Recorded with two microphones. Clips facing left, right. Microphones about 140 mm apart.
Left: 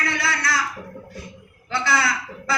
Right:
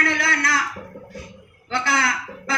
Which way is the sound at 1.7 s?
50° right (ahead or behind).